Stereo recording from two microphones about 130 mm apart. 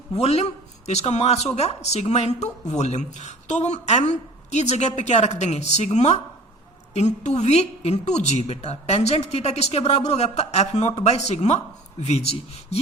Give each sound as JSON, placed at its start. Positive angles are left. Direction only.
{"t": 0.2, "sound": "a woman's voice", "side_deg": 55}